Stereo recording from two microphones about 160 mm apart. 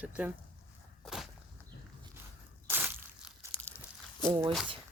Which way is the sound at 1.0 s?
Centre (ahead or behind).